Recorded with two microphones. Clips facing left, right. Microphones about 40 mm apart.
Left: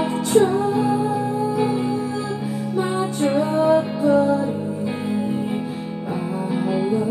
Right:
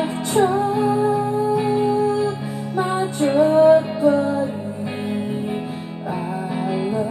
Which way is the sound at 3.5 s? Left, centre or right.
Centre.